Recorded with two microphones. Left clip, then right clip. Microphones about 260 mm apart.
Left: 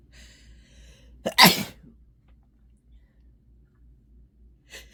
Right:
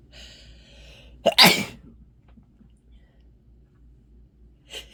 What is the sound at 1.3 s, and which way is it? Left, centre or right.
Sneeze, left.